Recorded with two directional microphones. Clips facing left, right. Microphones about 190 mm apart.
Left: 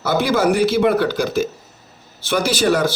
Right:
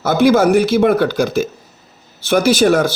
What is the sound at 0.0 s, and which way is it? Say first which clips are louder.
Speech: right 5 dB; 50° right (ahead or behind).